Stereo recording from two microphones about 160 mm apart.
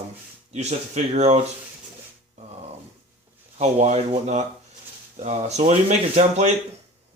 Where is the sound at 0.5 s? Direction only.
45° right (ahead or behind).